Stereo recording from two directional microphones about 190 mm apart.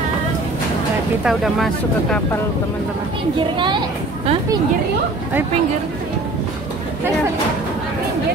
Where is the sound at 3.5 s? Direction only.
25° right (ahead or behind).